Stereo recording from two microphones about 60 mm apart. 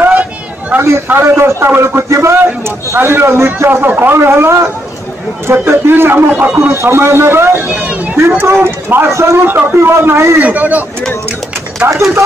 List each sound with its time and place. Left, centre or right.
0.7 s a man's voice: right
3.0 s a man's voice: right
3.8 s speech: right
4.2 s a man's voice: right
6.5 s a man's voice: right
7.5 s a sound: right
8.4 s speech: right
9.1 s a man's voice: right
9.4 s speech: right
9.8 s a man's voice: right
10.4 s speech: right
11.8 s speech: right